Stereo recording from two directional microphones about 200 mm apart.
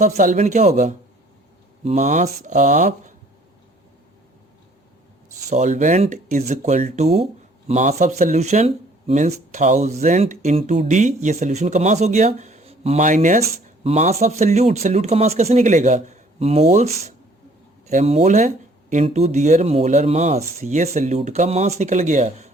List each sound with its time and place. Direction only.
0.0 s speech: 40° right (ahead or behind)
5.5 s speech: 35° right (ahead or behind)